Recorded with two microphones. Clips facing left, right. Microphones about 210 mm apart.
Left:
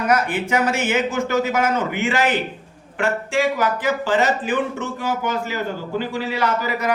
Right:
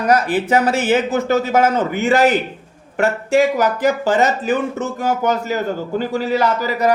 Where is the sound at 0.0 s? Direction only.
35° right (ahead or behind).